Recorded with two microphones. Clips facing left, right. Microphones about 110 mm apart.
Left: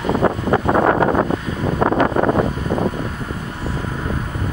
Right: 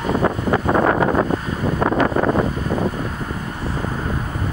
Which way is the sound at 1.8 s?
25° left (ahead or behind).